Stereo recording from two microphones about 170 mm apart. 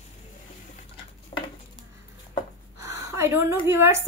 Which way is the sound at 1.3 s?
30° left (ahead or behind).